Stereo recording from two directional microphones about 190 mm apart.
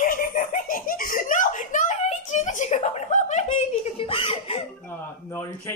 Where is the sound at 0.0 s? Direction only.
45° left (ahead or behind).